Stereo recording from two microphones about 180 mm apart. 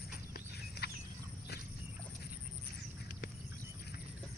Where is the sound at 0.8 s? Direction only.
60° left (ahead or behind).